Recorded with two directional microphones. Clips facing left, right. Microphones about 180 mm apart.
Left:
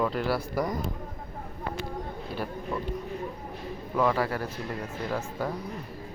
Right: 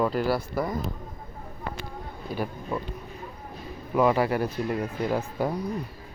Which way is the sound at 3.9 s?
20° right (ahead or behind).